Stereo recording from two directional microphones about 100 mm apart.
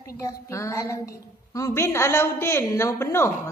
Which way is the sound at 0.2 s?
30° left (ahead or behind).